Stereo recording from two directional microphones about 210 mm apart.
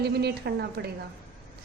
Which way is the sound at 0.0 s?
50° right (ahead or behind).